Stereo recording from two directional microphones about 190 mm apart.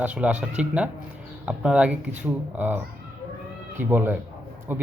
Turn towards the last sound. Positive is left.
turn(degrees=-10)  # may be behind; listen again after turning